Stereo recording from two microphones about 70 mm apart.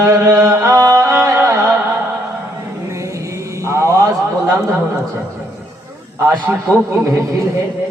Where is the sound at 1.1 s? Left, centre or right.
Right.